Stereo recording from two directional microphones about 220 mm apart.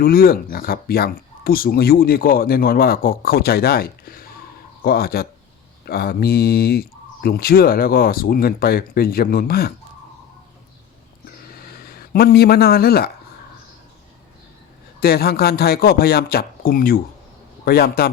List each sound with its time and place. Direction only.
0.0 s speech: 40° left (ahead or behind)
11.3 s a sound: 45° left (ahead or behind)
15.0 s speech: 45° left (ahead or behind)